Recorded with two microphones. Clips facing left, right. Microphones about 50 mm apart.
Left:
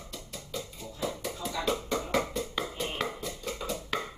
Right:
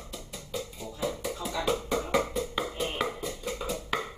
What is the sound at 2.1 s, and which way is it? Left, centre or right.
Music, centre.